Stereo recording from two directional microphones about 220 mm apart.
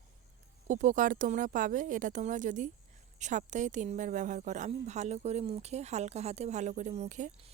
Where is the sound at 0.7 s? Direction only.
35° right (ahead or behind).